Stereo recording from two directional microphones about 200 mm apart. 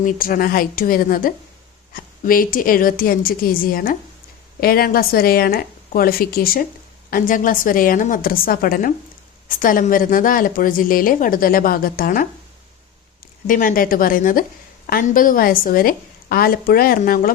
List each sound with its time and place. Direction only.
0.0 s a woman's voice: 45° left (ahead or behind)
13.5 s a woman's voice: 40° left (ahead or behind)